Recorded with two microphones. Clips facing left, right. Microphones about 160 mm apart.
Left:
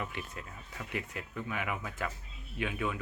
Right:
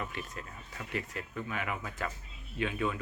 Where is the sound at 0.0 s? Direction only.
15° left (ahead or behind).